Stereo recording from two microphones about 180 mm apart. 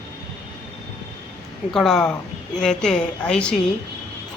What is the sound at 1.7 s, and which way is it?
A woman's voice, centre (ahead or behind).